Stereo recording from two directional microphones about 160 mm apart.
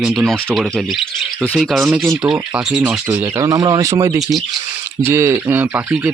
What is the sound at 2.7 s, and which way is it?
Speech, 5° right (ahead or behind).